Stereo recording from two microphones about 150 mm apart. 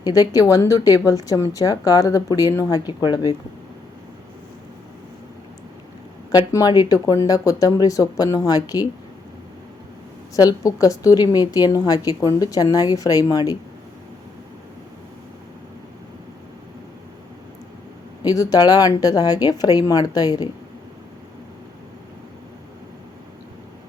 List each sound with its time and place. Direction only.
0.0 s a woman's voice: 25° left (ahead or behind)
6.5 s a woman's voice: 25° left (ahead or behind)
10.3 s a woman's voice: 20° left (ahead or behind)
18.2 s a woman's voice: 25° left (ahead or behind)